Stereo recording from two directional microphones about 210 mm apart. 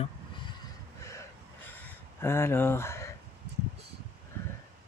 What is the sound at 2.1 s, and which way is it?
Speech, 10° left (ahead or behind).